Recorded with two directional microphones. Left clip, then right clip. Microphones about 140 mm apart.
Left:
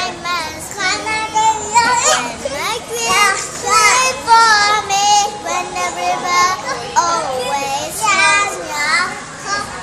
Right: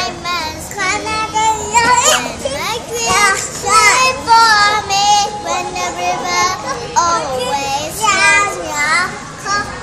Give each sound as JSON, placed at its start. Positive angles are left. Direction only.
{"t": 0.0, "sound": "child singing", "side_deg": -5}
{"t": 0.7, "sound": "child singing", "side_deg": -35}
{"t": 2.6, "sound": "children playing", "side_deg": 5}
{"t": 3.1, "sound": "children playing", "side_deg": -25}
{"t": 3.9, "sound": "child singing", "side_deg": 10}
{"t": 8.0, "sound": "a sound", "side_deg": -25}